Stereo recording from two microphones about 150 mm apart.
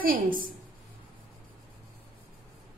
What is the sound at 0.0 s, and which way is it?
Speech, 70° right (ahead or behind).